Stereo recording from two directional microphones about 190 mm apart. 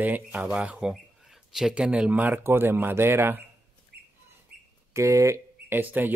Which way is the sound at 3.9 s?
60° right (ahead or behind).